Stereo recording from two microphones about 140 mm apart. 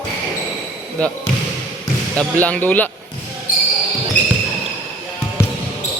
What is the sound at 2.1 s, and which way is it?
Speech, 10° left (ahead or behind).